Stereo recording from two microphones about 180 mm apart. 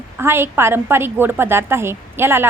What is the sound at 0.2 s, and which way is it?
A woman's voice, 15° right (ahead or behind).